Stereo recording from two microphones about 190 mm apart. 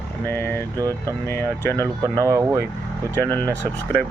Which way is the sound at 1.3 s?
10° left (ahead or behind).